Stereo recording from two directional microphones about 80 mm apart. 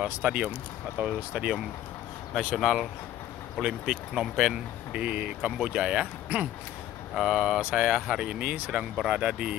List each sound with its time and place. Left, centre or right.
0.0 s speech: centre
7.2 s speech: centre
8.5 s speech: right
8.9 s speech: centre